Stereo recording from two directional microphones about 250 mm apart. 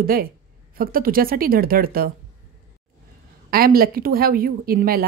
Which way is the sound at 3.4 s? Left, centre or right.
Right.